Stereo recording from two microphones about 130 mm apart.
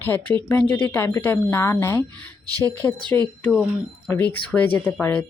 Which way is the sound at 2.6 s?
30° right (ahead or behind).